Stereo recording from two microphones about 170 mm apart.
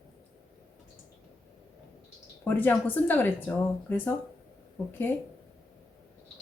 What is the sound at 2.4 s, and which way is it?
Speech, 10° left (ahead or behind).